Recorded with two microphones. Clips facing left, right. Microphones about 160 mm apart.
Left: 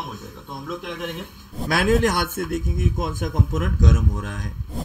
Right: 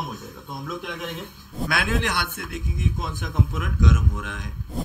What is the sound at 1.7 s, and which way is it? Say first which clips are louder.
A man's voice: left 7 dB; 40° left (ahead or behind).